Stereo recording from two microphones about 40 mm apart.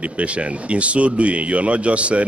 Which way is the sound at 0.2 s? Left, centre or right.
Right.